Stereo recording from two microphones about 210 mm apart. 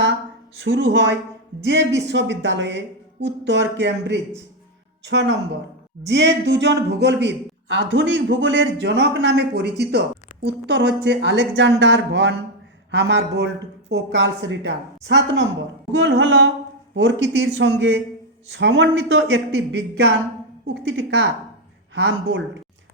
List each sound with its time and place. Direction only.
0.6 s a man's voice: 55° right (ahead or behind)